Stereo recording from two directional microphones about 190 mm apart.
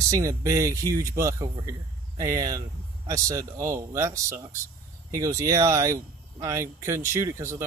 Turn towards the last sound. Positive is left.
turn(degrees=-15)  # may be behind; listen again after turning